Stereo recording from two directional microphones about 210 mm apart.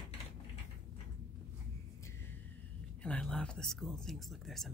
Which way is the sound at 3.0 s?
5° left (ahead or behind).